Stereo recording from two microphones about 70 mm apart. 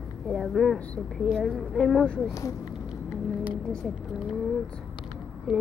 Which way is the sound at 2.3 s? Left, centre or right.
Left.